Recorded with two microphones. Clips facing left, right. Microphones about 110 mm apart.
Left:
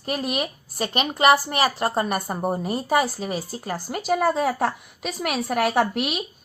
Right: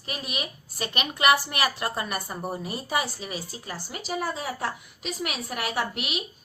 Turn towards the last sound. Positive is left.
turn(degrees=60)  # may be behind; listen again after turning